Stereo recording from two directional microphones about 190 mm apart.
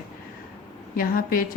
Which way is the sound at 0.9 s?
50° left (ahead or behind).